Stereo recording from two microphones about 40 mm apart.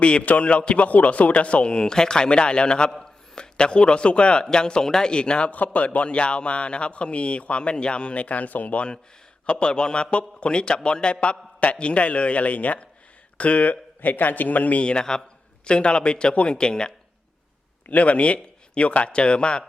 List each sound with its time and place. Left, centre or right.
0.0 s a man's voice: left
5.5 s a man's voice: left
9.5 s a man's voice: left
14.8 s a man's voice: centre
16.3 s a man's voice: left
16.6 s a man's voice: left
17.8 s a man's voice: left